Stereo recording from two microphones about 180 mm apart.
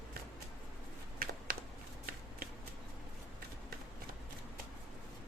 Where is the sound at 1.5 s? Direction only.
50° right (ahead or behind).